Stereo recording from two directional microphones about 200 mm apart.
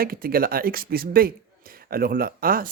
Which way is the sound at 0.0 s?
45° right (ahead or behind).